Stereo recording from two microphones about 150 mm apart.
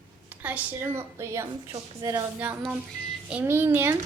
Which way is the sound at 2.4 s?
10° right (ahead or behind).